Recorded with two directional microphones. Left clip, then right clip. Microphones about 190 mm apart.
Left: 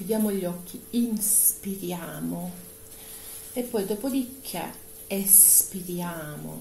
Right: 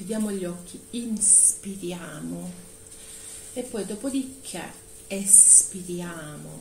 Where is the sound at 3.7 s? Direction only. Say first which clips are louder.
Left 3 dB; 30° left (ahead or behind).